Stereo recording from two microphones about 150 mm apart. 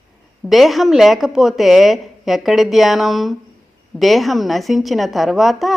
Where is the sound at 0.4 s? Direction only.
Centre (ahead or behind).